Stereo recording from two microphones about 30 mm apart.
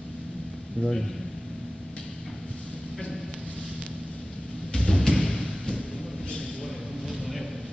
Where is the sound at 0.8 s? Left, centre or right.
Centre.